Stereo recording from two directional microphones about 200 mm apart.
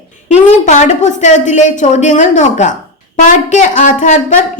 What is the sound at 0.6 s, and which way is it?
A woman's voice, 35° left (ahead or behind).